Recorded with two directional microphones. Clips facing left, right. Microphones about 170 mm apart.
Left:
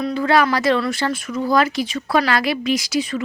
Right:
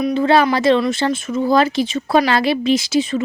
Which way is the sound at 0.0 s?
25° right (ahead or behind).